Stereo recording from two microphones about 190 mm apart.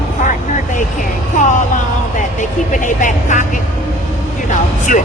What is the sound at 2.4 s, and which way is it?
Speech, 40° left (ahead or behind).